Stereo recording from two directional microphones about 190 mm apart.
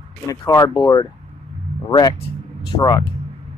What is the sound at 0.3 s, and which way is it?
Speech, 15° left (ahead or behind).